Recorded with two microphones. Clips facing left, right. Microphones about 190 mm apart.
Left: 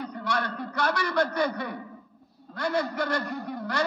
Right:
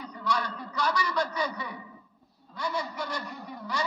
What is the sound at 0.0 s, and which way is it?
A man's voice, 55° left (ahead or behind).